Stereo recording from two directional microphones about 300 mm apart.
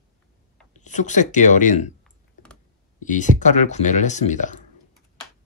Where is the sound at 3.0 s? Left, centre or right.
Left.